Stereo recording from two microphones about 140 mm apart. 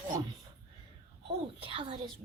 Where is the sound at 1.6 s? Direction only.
40° right (ahead or behind).